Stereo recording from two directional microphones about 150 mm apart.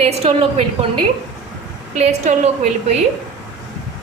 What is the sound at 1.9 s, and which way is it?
A woman's voice, 50° right (ahead or behind).